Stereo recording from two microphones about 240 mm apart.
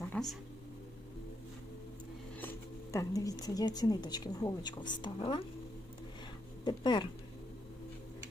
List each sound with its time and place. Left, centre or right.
0.1 s a sound: centre
2.9 s a woman's voice: centre
6.7 s speech: centre